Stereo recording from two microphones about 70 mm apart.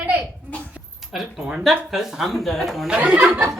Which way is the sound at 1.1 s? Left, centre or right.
Centre.